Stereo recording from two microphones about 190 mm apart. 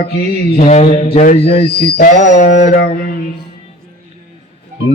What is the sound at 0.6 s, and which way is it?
Speech, 35° left (ahead or behind).